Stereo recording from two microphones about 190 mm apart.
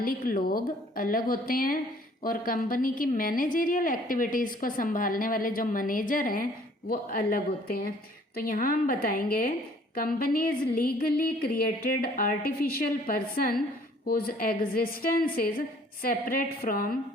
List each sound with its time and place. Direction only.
0.0 s a woman's voice: 50° left (ahead or behind)